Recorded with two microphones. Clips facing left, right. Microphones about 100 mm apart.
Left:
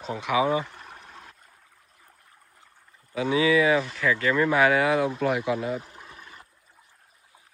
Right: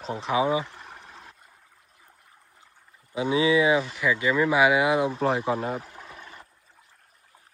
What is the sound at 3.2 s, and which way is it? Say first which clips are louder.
Speech: even; 25° right (ahead or behind).